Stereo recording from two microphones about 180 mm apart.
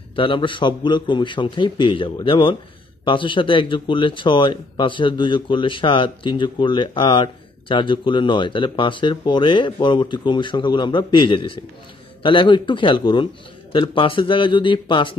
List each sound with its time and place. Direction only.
0.1 s speech: 30° left (ahead or behind)